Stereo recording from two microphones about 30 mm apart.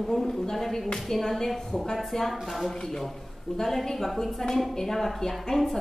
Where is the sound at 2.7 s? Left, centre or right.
Centre.